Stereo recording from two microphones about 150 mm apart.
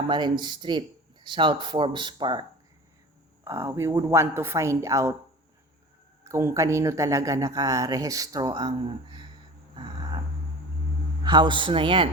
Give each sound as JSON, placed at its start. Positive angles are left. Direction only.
{"t": 0.1, "sound": "speech", "side_deg": -30}
{"t": 3.4, "sound": "speech", "side_deg": -15}
{"t": 6.2, "sound": "speech", "side_deg": -20}
{"t": 9.8, "sound": "a sound", "side_deg": -30}
{"t": 11.2, "sound": "speech", "side_deg": -30}